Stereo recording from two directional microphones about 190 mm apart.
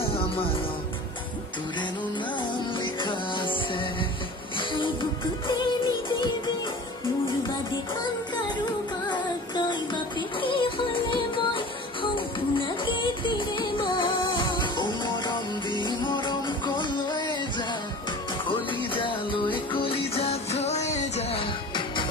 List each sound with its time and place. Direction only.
2.8 s music: 25° left (ahead or behind)
10.4 s music: 25° left (ahead or behind)
19.0 s music: 25° left (ahead or behind)